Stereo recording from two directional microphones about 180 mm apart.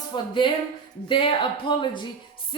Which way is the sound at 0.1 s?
25° left (ahead or behind).